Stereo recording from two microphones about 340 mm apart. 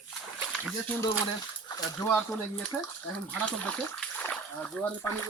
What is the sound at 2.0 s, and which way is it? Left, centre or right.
Speech, centre.